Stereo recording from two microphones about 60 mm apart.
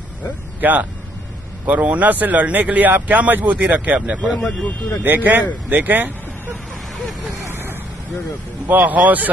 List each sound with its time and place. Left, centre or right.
0.6 s speech: right
4.4 s speech: centre
5.0 s speech: right
8.6 s speech: right